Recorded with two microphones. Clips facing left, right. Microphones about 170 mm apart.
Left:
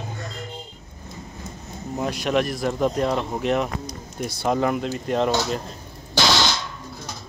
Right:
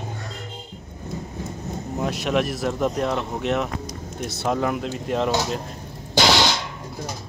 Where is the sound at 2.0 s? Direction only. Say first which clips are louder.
Left 1 dB; centre (ahead or behind).